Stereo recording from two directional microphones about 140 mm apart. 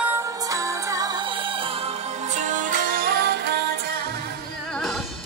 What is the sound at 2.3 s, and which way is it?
Music, 65° right (ahead or behind).